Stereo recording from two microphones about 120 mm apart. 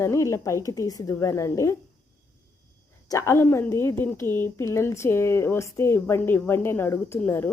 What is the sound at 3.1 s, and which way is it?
A woman's voice, 25° left (ahead or behind).